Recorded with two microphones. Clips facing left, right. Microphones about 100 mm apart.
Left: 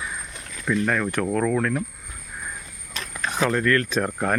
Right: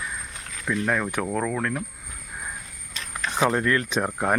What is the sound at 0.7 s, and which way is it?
Speech, 10° right (ahead or behind).